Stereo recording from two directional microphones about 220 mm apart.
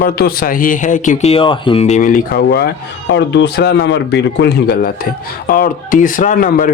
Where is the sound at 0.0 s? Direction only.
45° left (ahead or behind).